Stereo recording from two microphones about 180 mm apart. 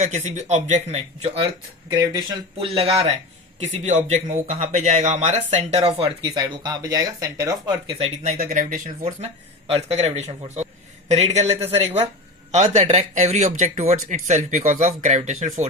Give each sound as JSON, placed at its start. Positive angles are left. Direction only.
{"t": 0.0, "sound": "speech", "side_deg": -45}
{"t": 1.9, "sound": "speech", "side_deg": -20}
{"t": 6.0, "sound": "speech", "side_deg": -20}
{"t": 7.9, "sound": "speech", "side_deg": -35}
{"t": 8.4, "sound": "speech", "side_deg": -50}
{"t": 9.2, "sound": "a man's voice", "side_deg": -35}